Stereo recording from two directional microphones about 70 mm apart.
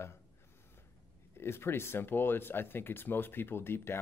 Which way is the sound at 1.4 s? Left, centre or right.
Left.